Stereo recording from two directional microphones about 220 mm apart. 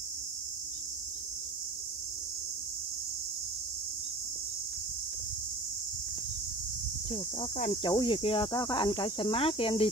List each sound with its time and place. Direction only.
7.1 s speech: 30° left (ahead or behind)